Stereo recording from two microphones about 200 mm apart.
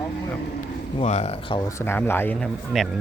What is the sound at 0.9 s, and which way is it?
Speech, 30° left (ahead or behind).